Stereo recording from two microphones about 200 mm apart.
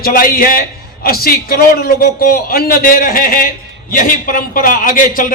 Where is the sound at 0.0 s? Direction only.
45° left (ahead or behind).